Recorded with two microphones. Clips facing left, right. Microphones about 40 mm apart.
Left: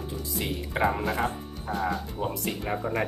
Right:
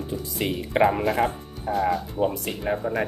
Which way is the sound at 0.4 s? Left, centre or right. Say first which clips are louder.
Right 6 dB; right.